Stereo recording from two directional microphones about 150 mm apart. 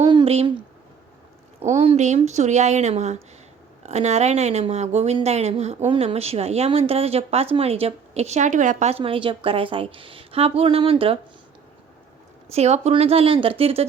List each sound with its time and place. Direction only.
0.1 s a sound: 40° right (ahead or behind)
1.6 s speech: 45° right (ahead or behind)
12.5 s speech: 45° right (ahead or behind)